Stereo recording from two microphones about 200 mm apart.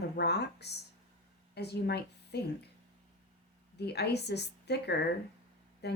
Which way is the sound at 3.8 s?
55° left (ahead or behind).